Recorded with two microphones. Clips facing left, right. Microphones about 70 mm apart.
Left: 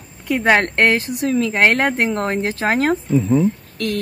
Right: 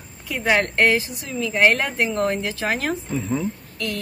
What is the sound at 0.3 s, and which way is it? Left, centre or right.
Speech, left.